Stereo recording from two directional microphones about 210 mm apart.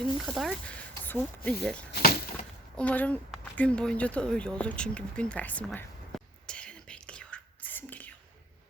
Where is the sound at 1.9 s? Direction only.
45° left (ahead or behind).